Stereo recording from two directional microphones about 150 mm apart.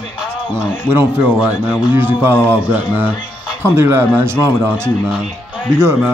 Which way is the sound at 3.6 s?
15° right (ahead or behind).